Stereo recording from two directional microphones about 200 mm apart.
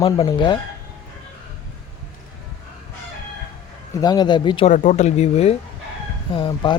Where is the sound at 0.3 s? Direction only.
25° left (ahead or behind).